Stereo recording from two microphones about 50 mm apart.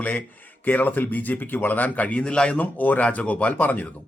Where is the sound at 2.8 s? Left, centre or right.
Left.